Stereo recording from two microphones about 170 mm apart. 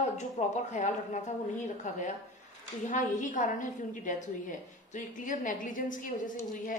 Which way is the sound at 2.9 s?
50° left (ahead or behind).